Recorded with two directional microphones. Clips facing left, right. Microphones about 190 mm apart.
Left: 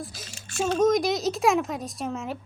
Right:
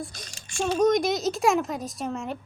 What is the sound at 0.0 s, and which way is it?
A woman's voice, 5° left (ahead or behind).